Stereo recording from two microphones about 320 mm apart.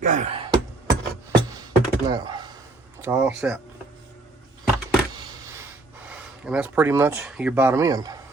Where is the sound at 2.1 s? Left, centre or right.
Centre.